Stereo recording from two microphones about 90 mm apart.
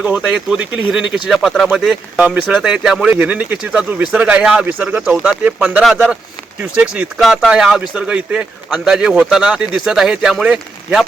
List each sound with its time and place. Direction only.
0.0 s speech: 10° right (ahead or behind)
3.1 s speech: 15° right (ahead or behind)
7.2 s speech: centre (ahead or behind)